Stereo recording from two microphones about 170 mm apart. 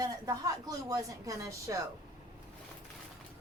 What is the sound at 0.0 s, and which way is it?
A woman's voice, 20° right (ahead or behind).